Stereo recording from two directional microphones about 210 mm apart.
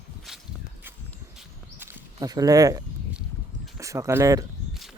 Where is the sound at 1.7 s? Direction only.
10° right (ahead or behind).